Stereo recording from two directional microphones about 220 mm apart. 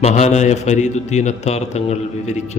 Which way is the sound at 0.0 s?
30° left (ahead or behind).